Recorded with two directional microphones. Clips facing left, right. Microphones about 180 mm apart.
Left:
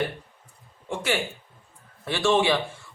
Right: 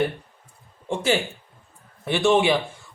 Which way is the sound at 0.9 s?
25° right (ahead or behind).